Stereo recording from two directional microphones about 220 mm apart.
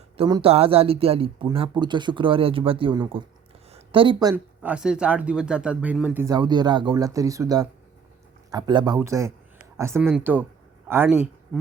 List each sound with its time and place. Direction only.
0.2 s speech: 20° right (ahead or behind)
3.7 s a sound: 25° right (ahead or behind)
4.7 s speech: 5° right (ahead or behind)